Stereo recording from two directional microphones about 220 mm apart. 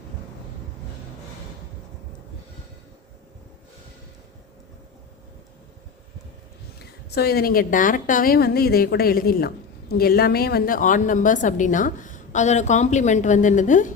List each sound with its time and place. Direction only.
6.7 s a woman's voice: 45° left (ahead or behind)